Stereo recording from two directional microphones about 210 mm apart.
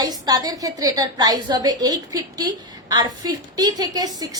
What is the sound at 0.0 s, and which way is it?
A woman's voice, 20° right (ahead or behind).